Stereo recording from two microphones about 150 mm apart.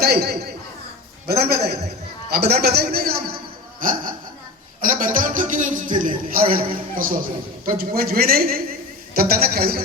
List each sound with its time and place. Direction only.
0.0 s a man's voice: 90° right
3.8 s a man's voice: 65° right (ahead or behind)
7.6 s speech: 80° right